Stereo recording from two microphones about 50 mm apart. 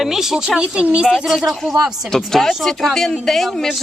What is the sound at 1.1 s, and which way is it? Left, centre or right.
Speech, centre.